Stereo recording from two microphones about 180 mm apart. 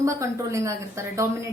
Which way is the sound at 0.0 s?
15° right (ahead or behind).